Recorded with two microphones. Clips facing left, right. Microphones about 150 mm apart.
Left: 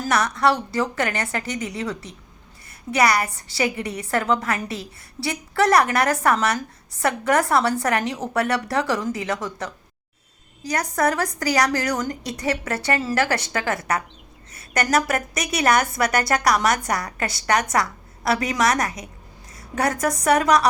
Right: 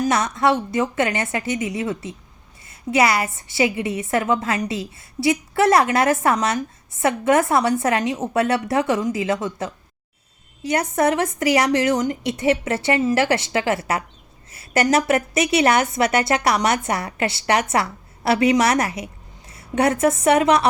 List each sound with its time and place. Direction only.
0.0 s a woman's voice: 20° right (ahead or behind)